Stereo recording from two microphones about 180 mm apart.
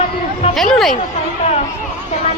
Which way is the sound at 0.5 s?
Centre (ahead or behind).